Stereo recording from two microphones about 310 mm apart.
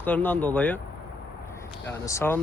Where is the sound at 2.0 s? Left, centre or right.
Centre.